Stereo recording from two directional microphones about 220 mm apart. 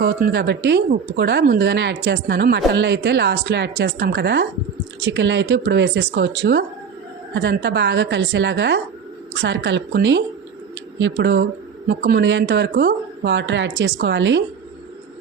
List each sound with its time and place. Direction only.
0.0 s speech: 45° right (ahead or behind)